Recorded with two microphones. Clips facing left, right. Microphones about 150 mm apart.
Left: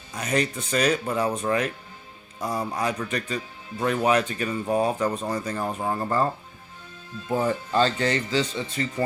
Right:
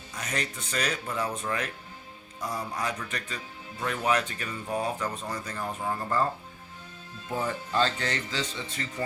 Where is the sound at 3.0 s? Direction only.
20° left (ahead or behind).